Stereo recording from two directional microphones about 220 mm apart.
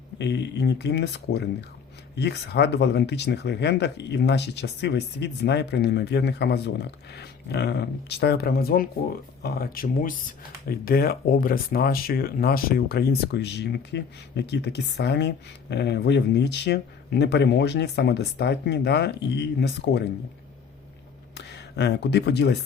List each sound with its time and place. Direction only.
0.2 s speech: 50° left (ahead or behind)
21.3 s speech: 50° left (ahead or behind)